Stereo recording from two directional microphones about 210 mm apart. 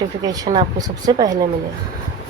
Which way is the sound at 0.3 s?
20° right (ahead or behind).